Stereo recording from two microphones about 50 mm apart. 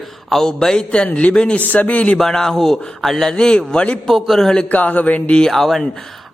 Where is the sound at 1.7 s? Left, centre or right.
Left.